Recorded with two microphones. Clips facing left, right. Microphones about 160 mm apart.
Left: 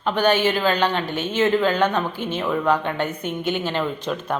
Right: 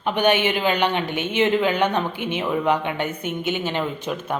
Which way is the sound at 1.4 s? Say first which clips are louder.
Left 1 dB; 15° right (ahead or behind).